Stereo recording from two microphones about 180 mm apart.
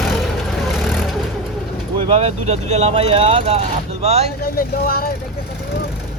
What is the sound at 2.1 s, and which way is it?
Speech, 35° right (ahead or behind).